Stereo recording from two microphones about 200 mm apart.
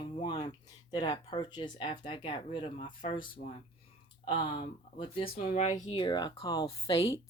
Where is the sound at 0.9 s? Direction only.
20° left (ahead or behind).